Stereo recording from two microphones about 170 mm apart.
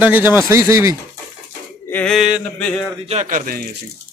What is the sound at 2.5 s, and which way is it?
Speech, 5° left (ahead or behind).